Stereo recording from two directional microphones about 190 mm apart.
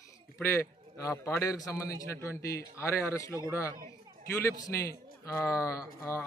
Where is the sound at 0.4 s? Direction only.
15° left (ahead or behind).